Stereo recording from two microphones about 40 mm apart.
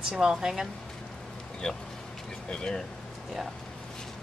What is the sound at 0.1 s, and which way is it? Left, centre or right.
Speech, centre.